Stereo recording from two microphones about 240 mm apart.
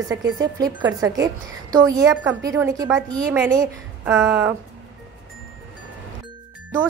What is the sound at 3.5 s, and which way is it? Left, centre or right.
A woman's voice, centre.